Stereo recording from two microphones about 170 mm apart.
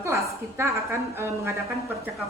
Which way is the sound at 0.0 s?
15° right (ahead or behind).